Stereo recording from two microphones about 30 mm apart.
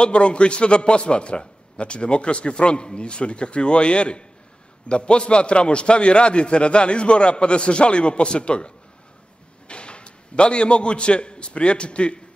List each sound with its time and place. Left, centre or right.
0.0 s a man's voice: left